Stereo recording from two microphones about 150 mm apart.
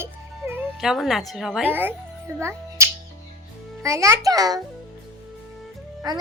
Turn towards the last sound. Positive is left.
turn(degrees=-25)  # may be behind; listen again after turning